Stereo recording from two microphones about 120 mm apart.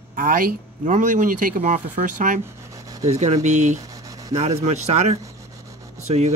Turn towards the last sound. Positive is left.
turn(degrees=-65)  # may be behind; listen again after turning